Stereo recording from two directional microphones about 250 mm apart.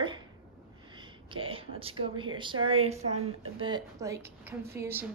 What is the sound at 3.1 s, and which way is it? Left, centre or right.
Speech, right.